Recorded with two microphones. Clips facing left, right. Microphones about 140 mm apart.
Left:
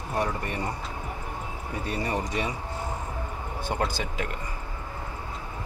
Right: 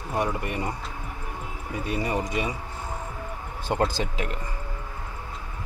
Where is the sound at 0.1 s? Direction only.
10° right (ahead or behind).